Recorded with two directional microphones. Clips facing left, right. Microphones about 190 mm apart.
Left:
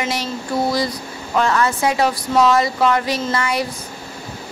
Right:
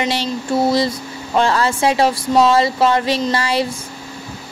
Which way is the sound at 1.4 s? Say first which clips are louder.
Right 2 dB; 30° right (ahead or behind).